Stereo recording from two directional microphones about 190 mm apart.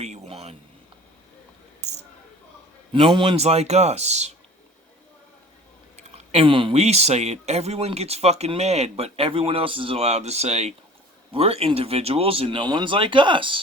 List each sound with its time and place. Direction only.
0.0 s a sound: 35° right (ahead or behind)
2.9 s speech: 25° right (ahead or behind)
6.0 s speech: 30° right (ahead or behind)